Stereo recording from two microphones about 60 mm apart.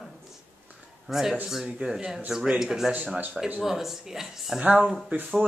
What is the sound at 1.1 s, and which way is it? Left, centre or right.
A woman's voice, centre.